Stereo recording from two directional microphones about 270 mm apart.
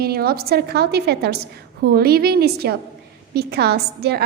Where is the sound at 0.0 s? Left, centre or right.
Right.